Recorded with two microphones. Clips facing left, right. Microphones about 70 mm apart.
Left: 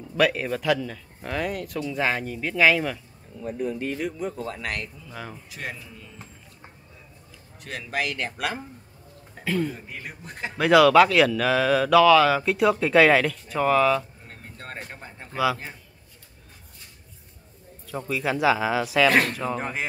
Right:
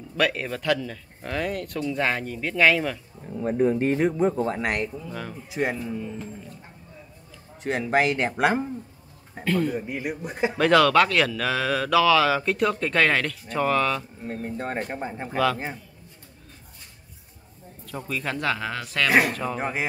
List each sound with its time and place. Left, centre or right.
0.2 s speech: centre
3.4 s speech: right
5.1 s speech: centre
5.5 s speech: right
7.6 s speech: right
9.4 s speech: centre
9.8 s a man's voice: centre
10.6 s speech: centre
14.2 s a man's voice: centre
15.3 s speech: centre
17.8 s speech: centre